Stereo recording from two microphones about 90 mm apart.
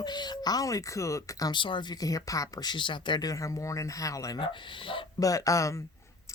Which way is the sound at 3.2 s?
35° left (ahead or behind).